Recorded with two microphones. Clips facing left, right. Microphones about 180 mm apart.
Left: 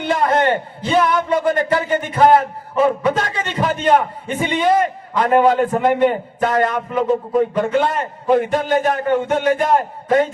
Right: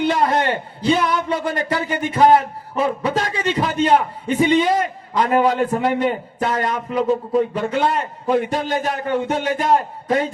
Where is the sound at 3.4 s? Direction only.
45° left (ahead or behind).